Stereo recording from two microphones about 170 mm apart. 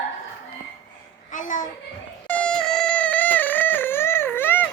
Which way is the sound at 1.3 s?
50° left (ahead or behind).